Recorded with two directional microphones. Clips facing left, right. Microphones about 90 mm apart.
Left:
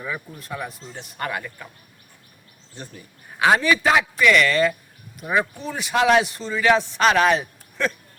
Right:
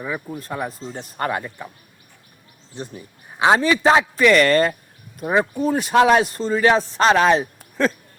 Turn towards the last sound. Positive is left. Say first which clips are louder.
# right 5 dB
turn(degrees=-35)  # may be behind; listen again after turning